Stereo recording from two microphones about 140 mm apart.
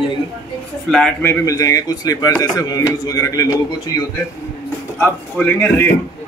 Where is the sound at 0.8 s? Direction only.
5° left (ahead or behind).